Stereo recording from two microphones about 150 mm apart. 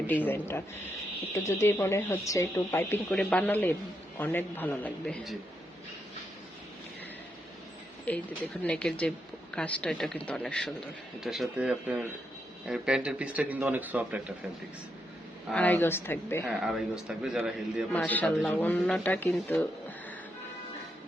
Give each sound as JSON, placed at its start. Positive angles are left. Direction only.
{"t": 0.1, "sound": "speech", "side_deg": 10}
{"t": 3.1, "sound": "speech", "side_deg": 5}
{"t": 8.1, "sound": "speech", "side_deg": 10}
{"t": 15.5, "sound": "speech", "side_deg": 10}
{"t": 16.5, "sound": "speech", "side_deg": -5}
{"t": 17.9, "sound": "speech", "side_deg": 10}
{"t": 18.7, "sound": "speech", "side_deg": 0}